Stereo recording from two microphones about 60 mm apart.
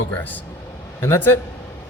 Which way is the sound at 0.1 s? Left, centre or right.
Left.